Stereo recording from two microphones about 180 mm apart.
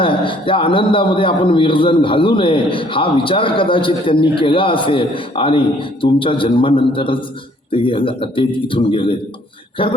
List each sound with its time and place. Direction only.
0.0 s a man's voice: 30° left (ahead or behind)